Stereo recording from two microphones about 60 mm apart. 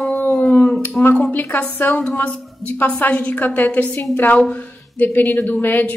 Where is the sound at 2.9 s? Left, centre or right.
Left.